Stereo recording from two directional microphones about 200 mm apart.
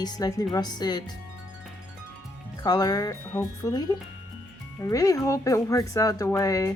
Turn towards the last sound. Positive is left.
turn(degrees=15)  # may be behind; listen again after turning